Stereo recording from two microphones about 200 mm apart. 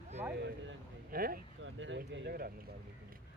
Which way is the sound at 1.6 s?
70° right (ahead or behind).